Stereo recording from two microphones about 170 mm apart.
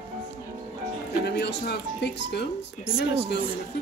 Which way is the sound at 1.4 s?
80° left.